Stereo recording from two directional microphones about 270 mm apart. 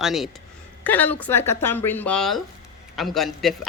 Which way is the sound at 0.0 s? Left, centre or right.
Centre.